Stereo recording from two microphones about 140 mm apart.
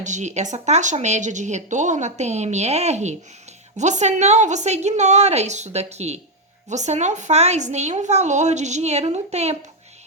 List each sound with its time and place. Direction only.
0.0 s a woman's voice: 60° right (ahead or behind)